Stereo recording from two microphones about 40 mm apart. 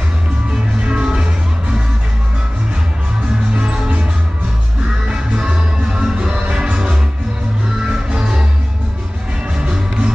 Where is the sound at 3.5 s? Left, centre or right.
Right.